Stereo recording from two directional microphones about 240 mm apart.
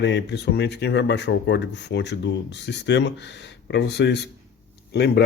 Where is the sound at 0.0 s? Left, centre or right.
Left.